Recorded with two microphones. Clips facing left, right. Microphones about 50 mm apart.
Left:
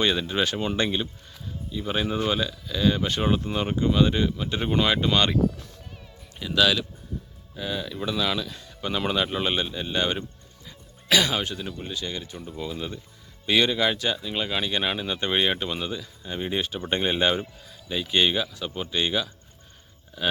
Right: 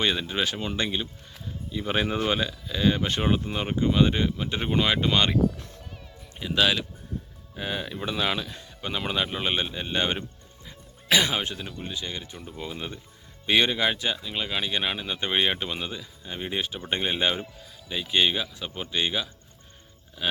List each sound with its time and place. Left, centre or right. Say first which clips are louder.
0.0 s speech: left 2 dB; centre
1.3 s music: even; right
2.2 s speech: even; right
6.4 s speech: left 2 dB; right
7.5 s speech: left 1 dB; right
8.8 s speech: left 3 dB; centre
9.6 s speech: left 1 dB; centre
10.7 s music: left 1 dB; right
11.5 s speech: left 2 dB; centre
11.9 s speech: left 2 dB; centre